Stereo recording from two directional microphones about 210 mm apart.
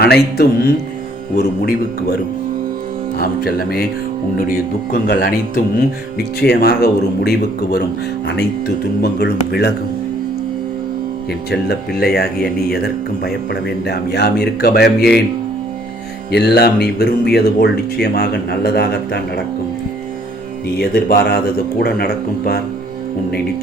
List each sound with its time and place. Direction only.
0.0 s speech: 50° left (ahead or behind)
3.2 s speech: 45° left (ahead or behind)
9.0 s speech: 50° left (ahead or behind)
11.5 s speech: 50° left (ahead or behind)
16.3 s speech: 50° left (ahead or behind)
20.7 s speech: 50° left (ahead or behind)